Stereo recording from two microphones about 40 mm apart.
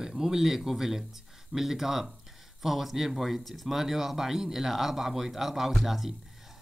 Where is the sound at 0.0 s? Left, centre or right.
Centre.